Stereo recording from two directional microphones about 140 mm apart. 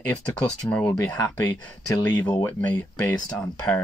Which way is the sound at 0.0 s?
10° left (ahead or behind).